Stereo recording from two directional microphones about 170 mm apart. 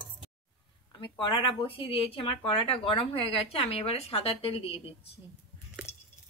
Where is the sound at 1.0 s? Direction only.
30° left (ahead or behind).